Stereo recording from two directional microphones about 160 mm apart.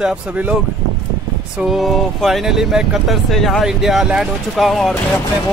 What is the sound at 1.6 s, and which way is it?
Speech, centre (ahead or behind).